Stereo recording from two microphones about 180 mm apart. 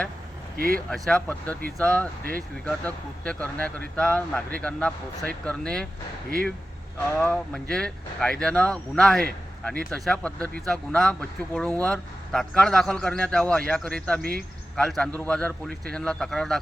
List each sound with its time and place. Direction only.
0.5 s speech: 55° right (ahead or behind)
0.9 s speech: centre (ahead or behind)
7.2 s speech: 5° left (ahead or behind)
14.2 s speech: 55° right (ahead or behind)
14.8 s speech: centre (ahead or behind)